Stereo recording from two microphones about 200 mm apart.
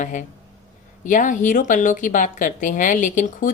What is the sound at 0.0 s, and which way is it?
Speech, 40° left (ahead or behind).